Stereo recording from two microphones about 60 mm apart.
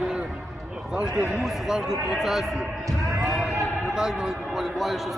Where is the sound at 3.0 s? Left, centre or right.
Right.